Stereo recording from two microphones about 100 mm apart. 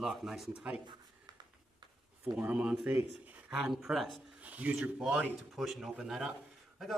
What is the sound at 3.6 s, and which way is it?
Speech, centre (ahead or behind).